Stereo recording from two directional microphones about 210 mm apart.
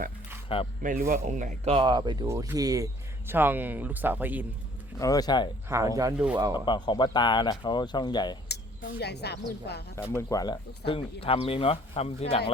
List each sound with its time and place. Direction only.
0.4 s speech: 25° left (ahead or behind)
0.8 s speech: 40° right (ahead or behind); by 4.4 s 10° right (ahead or behind)
4.9 s speech: 15° left (ahead or behind)
5.6 s speech: 15° right (ahead or behind)
6.5 s speech: 20° left (ahead or behind)
9.0 s a woman's voice: 50° left (ahead or behind)
10.2 s speech: 15° left (ahead or behind)